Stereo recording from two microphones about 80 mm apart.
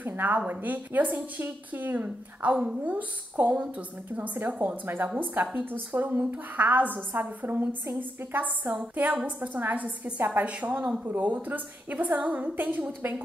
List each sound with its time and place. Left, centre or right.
0.0 s a woman's voice: right